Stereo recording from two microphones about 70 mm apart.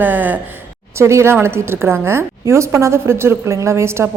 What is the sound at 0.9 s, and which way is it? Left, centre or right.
A woman's voice, right.